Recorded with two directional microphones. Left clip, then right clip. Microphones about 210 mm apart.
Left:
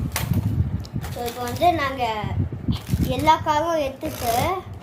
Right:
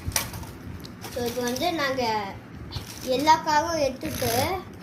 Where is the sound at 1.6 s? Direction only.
40° left (ahead or behind).